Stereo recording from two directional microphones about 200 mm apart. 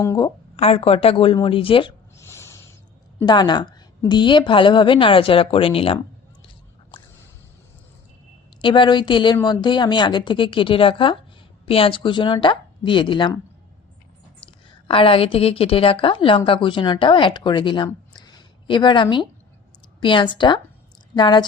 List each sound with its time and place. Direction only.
0.0 s a woman's voice: 15° left (ahead or behind)
0.5 s a woman's voice: 30° left (ahead or behind)
2.1 s a sound: 15° left (ahead or behind)
3.2 s a woman's voice: 20° left (ahead or behind)
8.6 s a woman's voice: 25° left (ahead or behind)
14.8 s a woman's voice: 25° left (ahead or behind)